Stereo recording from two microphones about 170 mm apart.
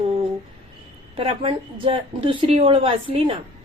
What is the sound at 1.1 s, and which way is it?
A woman's voice, 35° right (ahead or behind).